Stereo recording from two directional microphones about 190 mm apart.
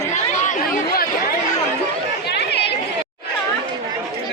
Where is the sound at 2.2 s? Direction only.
60° left (ahead or behind).